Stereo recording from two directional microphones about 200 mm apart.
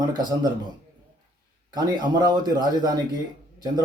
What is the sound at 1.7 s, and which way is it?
Speech, 20° right (ahead or behind).